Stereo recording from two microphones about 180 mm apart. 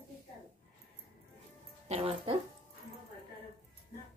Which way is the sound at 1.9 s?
30° right (ahead or behind).